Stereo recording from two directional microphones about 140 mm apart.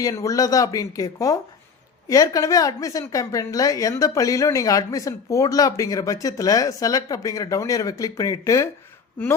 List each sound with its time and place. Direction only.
0.0 s a woman's voice: 25° left (ahead or behind)